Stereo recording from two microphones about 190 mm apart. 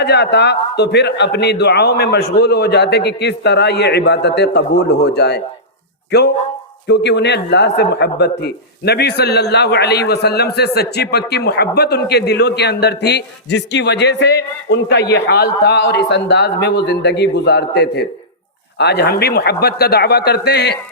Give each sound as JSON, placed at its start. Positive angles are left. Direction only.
{"t": 0.0, "sound": "a man's voice", "side_deg": 65}